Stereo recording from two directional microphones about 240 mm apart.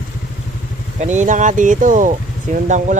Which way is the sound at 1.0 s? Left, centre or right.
Right.